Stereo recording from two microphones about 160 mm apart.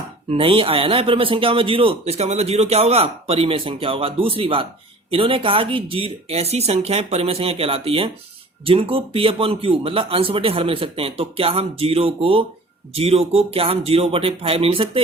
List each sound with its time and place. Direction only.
0.3 s a man's voice: 35° right (ahead or behind)